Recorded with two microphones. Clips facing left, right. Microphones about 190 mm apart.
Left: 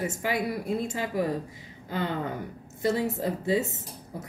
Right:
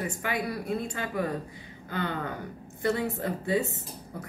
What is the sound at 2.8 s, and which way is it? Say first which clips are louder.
Speech: left 2 dB; 20° left (ahead or behind).